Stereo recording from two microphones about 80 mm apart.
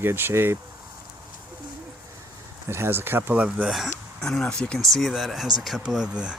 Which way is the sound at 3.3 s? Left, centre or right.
Centre.